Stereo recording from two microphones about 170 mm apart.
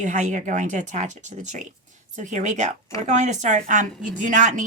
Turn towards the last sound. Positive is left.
turn(degrees=-45)  # may be behind; listen again after turning